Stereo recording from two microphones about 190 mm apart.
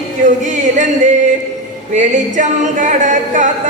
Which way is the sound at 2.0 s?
40° right (ahead or behind).